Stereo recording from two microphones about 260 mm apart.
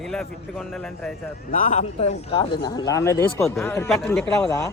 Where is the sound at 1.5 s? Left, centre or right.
Left.